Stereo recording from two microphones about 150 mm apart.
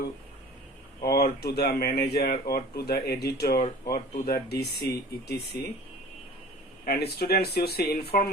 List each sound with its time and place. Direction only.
1.0 s speech: 90° left
6.8 s speech: 90° left